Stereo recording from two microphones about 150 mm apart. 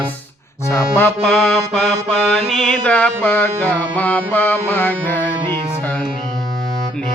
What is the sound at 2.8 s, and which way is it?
Music, 10° left (ahead or behind).